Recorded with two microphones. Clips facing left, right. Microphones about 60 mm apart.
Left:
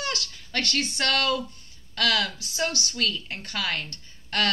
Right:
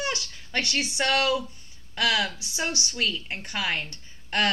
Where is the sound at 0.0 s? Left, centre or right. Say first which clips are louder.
Right 1 dB; centre.